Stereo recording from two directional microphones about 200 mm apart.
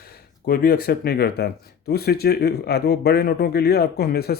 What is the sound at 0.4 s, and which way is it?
Speech, 50° left (ahead or behind).